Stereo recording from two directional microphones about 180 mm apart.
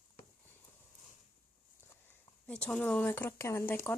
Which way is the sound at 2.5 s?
5° left (ahead or behind).